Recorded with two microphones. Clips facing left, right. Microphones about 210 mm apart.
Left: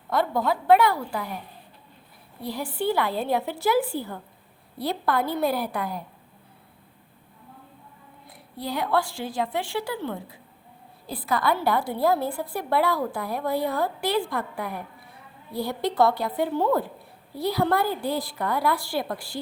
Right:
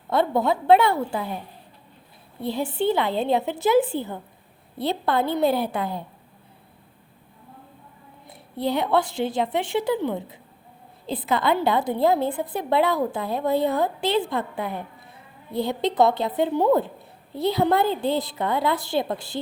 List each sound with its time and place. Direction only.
0.1 s a woman's voice: 25° right (ahead or behind)
2.4 s a woman's voice: 25° right (ahead or behind)
8.3 s a woman's voice: 25° right (ahead or behind)